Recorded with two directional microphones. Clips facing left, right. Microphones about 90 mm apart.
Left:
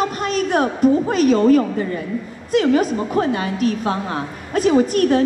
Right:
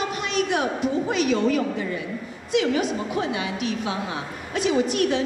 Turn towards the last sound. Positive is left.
turn(degrees=45)  # may be behind; listen again after turning